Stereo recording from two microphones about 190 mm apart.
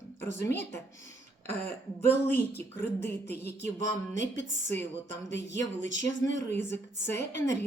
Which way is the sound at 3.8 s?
70° left (ahead or behind).